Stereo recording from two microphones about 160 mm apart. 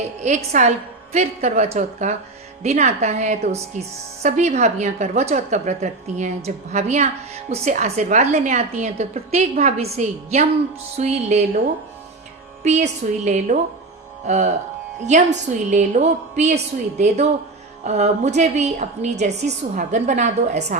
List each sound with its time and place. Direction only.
0.2 s a woman's voice: 45° right (ahead or behind)
12.6 s a woman's voice: 45° right (ahead or behind)
17.8 s a woman's voice: 45° right (ahead or behind)